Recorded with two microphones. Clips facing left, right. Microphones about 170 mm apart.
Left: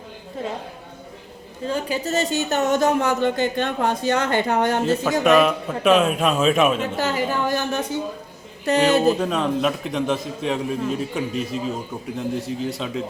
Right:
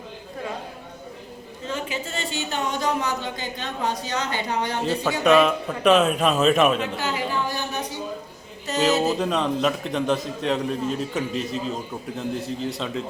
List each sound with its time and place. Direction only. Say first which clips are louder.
1.6 s speech: left 6 dB; 35° left (ahead or behind)
5.2 s a man's voice: right 1 dB; centre (ahead or behind)
6.9 s a woman's voice: left 4 dB; 40° left (ahead or behind)
8.9 s a man's voice: left 3 dB; centre (ahead or behind)